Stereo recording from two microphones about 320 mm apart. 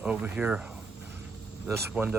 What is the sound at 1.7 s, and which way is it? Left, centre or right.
Speech, centre.